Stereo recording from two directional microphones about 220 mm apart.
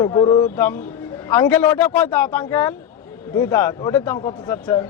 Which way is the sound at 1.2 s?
10° left (ahead or behind).